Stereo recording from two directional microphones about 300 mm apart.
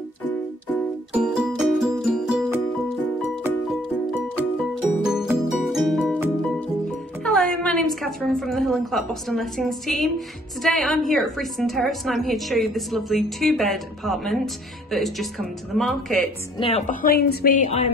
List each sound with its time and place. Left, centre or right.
1.1 s music: centre
5.0 s music: centre
7.2 s a woman's voice: centre
16.5 s a woman's voice: centre